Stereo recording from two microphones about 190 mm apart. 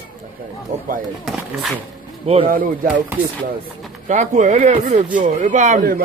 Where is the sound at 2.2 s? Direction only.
30° right (ahead or behind).